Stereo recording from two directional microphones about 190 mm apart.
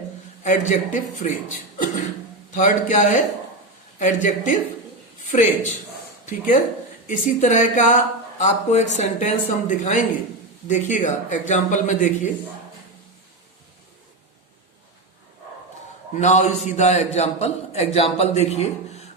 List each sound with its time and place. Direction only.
0.4 s a man's voice: 40° left (ahead or behind)
2.6 s a man's voice: 40° left (ahead or behind)
16.1 s a man's voice: 35° left (ahead or behind)